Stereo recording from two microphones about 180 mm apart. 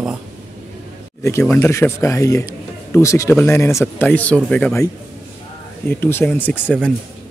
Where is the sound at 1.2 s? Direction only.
15° left (ahead or behind).